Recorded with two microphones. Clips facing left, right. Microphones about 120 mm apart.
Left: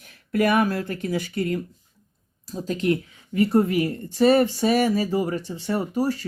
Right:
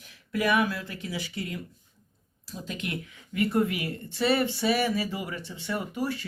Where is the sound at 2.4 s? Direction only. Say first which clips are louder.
Left 12 dB; 40° left (ahead or behind).